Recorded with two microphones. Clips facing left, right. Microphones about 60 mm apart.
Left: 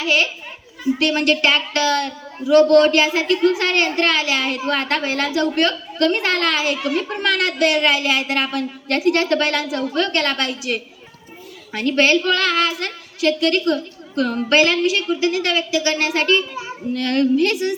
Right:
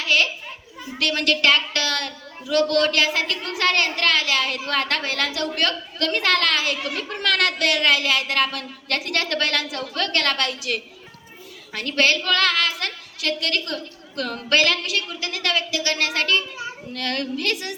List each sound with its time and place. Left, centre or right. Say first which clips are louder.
0.0 s a child's voice: left 2 dB; left